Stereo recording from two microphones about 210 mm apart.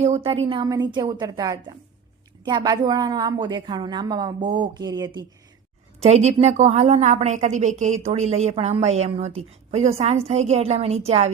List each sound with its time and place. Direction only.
0.0 s a woman's voice: 30° right (ahead or behind)
6.0 s a woman's voice: 30° right (ahead or behind)